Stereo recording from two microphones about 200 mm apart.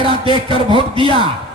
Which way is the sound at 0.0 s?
25° right (ahead or behind).